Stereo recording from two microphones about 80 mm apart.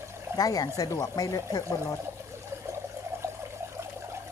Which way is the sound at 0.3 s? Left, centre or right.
Left.